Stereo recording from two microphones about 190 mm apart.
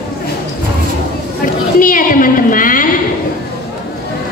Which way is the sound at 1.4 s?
45° left (ahead or behind).